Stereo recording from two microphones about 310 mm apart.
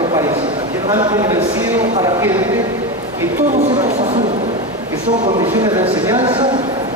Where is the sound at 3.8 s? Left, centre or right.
Right.